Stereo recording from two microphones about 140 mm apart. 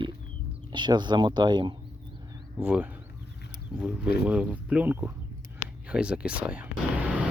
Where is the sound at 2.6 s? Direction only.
15° right (ahead or behind).